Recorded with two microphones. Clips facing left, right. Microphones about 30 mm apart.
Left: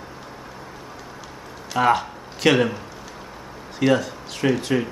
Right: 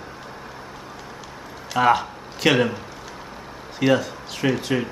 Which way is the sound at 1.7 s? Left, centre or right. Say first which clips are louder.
Right 1 dB; centre.